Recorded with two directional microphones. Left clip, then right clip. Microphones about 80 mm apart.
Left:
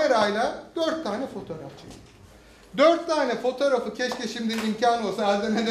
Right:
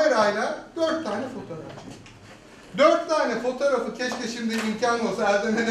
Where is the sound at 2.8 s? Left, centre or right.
Right.